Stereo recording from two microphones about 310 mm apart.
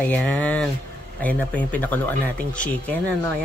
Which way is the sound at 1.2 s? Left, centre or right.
Centre.